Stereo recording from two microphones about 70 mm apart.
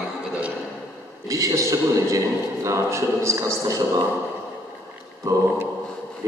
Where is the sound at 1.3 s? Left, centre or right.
Right.